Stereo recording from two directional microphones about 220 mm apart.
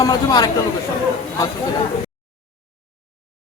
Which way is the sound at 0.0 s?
15° left (ahead or behind).